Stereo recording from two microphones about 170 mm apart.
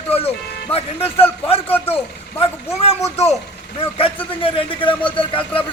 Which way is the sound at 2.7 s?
40° left (ahead or behind).